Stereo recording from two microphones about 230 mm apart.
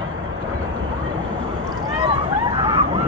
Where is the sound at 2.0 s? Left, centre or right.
Right.